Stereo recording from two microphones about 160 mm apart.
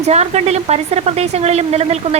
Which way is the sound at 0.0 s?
45° right (ahead or behind).